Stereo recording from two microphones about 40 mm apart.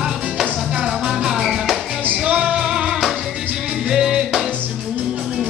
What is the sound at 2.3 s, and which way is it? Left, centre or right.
Music, right.